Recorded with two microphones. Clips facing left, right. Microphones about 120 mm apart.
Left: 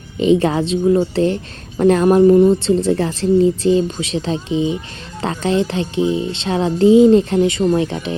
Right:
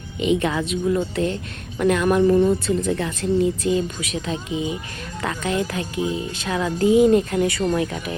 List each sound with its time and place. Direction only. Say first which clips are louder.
0.2 s speech: left 6 dB; 35° left (ahead or behind)